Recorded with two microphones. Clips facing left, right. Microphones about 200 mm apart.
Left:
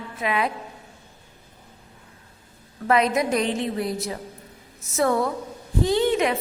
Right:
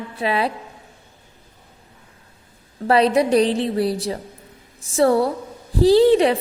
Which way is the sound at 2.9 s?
30° right (ahead or behind).